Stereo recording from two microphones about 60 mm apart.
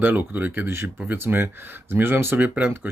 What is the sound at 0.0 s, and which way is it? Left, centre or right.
Speech, right.